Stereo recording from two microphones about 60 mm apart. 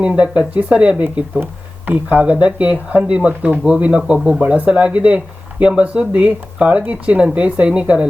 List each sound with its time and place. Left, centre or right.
0.0 s speech: centre